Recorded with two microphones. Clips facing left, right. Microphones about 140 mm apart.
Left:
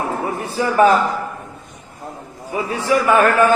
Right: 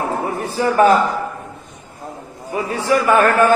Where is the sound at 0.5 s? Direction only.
40° right (ahead or behind).